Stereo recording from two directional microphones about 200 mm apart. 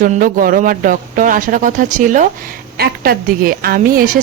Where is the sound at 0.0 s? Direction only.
45° right (ahead or behind).